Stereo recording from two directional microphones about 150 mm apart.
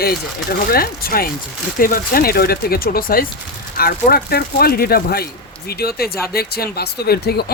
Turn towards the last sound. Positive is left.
turn(degrees=90)